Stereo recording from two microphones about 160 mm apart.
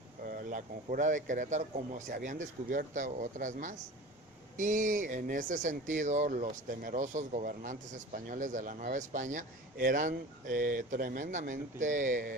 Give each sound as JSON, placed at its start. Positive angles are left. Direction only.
{"t": 0.3, "sound": "speech", "side_deg": -55}